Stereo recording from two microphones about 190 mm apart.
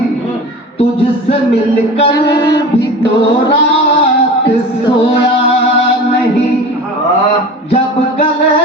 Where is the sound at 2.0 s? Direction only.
20° left (ahead or behind).